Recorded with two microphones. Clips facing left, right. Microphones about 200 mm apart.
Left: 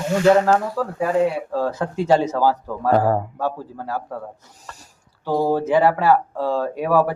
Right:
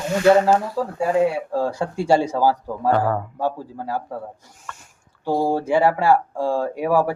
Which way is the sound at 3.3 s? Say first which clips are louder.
Right 1 dB; 15° right (ahead or behind).